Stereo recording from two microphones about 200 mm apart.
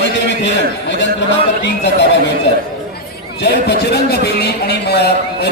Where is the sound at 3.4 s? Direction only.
55° left (ahead or behind).